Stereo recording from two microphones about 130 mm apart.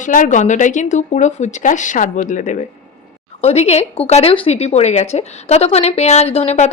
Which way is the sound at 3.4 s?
55° left (ahead or behind).